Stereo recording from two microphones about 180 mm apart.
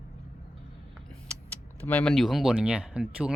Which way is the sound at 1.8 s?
10° left (ahead or behind).